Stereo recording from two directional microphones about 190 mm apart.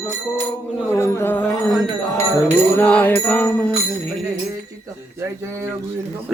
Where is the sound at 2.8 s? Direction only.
5° left (ahead or behind).